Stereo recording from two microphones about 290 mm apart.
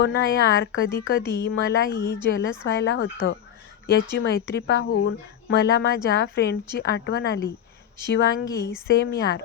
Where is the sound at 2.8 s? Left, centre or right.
Left.